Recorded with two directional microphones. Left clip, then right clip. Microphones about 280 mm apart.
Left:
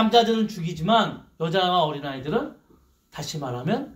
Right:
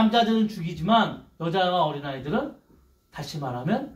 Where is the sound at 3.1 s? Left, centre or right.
Left.